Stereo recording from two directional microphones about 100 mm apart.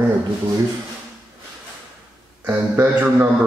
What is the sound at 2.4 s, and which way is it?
Speech, 20° right (ahead or behind).